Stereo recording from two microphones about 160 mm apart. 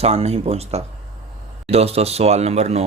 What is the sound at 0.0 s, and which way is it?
Speech, 40° right (ahead or behind).